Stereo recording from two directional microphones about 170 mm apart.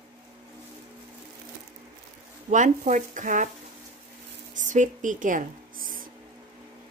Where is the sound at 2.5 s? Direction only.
45° right (ahead or behind).